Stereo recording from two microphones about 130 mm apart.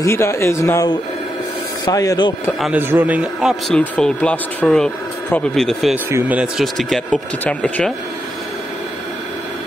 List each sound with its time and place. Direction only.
0.0 s speech: 20° left (ahead or behind)
1.9 s speech: 30° left (ahead or behind)
2.8 s a man's voice: 15° right (ahead or behind)
3.6 s speech: 10° left (ahead or behind)
6.0 s speech: 20° right (ahead or behind)
6.3 s speech: 5° right (ahead or behind)